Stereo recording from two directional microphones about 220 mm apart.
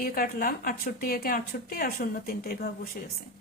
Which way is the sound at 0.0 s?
40° left (ahead or behind).